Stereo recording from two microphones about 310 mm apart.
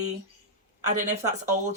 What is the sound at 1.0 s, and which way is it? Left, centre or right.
Speech, right.